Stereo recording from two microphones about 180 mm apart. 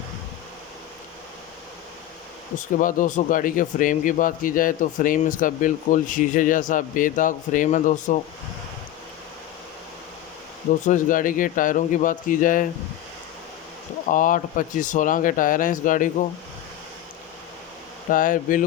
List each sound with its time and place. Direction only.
2.6 s speech: 45° left (ahead or behind)
10.8 s speech: 45° left (ahead or behind)
14.1 s speech: 45° left (ahead or behind)
18.1 s speech: 50° left (ahead or behind)